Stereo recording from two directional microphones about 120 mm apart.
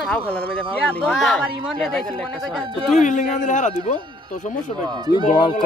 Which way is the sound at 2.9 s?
90° left.